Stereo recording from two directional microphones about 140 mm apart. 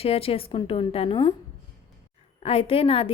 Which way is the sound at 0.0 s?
45° left (ahead or behind).